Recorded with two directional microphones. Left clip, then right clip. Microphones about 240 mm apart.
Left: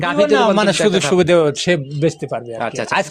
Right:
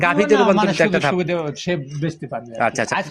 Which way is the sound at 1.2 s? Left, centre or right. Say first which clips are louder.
Left 9 dB; left.